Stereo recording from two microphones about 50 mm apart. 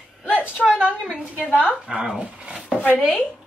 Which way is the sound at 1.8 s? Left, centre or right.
Centre.